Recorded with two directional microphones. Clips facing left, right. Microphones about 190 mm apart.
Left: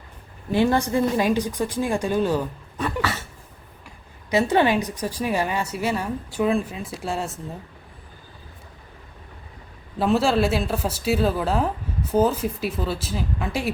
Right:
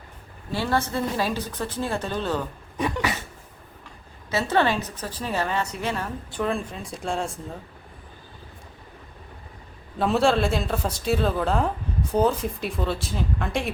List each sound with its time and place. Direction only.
0.5 s speech: 15° left (ahead or behind)
3.0 s a sound: 15° right (ahead or behind)
3.8 s speech: 15° left (ahead or behind)
10.0 s a woman's voice: centre (ahead or behind)